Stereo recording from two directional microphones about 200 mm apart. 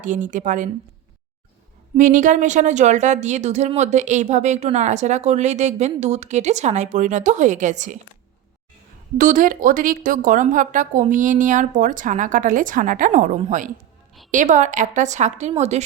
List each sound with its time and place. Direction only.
0.0 s speech: 40° right (ahead or behind)
2.0 s speech: 40° right (ahead or behind)
9.1 s speech: 45° right (ahead or behind)